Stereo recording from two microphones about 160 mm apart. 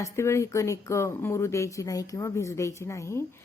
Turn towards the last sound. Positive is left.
turn(degrees=15)  # may be behind; listen again after turning